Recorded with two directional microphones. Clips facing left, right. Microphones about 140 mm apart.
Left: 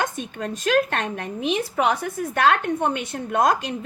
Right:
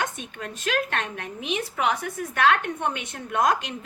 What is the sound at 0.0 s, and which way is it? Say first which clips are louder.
A woman's voice: left 4 dB; 35° left (ahead or behind).